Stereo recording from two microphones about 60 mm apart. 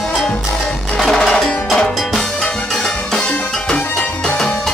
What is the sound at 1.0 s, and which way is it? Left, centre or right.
Music, centre.